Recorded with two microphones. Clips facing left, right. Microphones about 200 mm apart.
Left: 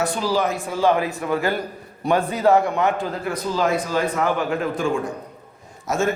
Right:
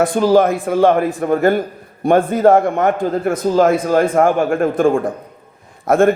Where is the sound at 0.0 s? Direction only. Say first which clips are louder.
Right 9 dB; 50° right (ahead or behind).